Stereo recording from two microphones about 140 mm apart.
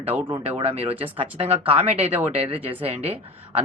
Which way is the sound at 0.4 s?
45° right (ahead or behind).